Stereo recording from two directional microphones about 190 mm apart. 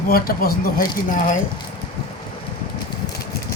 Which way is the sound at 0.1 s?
50° left (ahead or behind).